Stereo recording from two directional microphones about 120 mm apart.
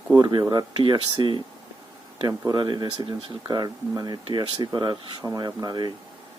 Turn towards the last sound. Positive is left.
turn(degrees=-35)  # may be behind; listen again after turning